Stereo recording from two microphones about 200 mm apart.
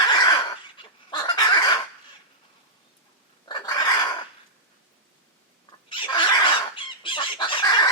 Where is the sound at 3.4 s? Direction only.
20° left (ahead or behind).